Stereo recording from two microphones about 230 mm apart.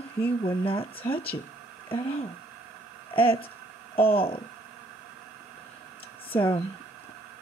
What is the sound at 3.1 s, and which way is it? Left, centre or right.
Speech, left.